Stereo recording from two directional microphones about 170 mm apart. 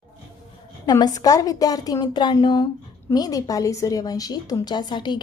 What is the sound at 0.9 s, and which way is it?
A woman's voice, 25° left (ahead or behind).